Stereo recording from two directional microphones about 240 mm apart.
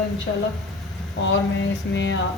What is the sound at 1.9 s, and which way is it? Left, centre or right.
Speech, left.